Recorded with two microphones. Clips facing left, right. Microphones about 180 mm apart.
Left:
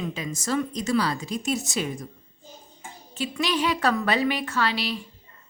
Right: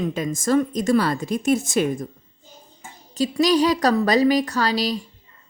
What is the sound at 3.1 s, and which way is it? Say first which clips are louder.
A woman's voice: right 8 dB; 40° right (ahead or behind).